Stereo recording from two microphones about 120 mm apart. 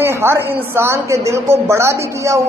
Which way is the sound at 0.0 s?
20° right (ahead or behind).